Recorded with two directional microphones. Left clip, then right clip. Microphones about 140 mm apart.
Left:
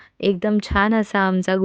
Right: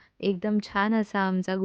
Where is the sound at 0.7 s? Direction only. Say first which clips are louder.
Left 7 dB; 25° left (ahead or behind).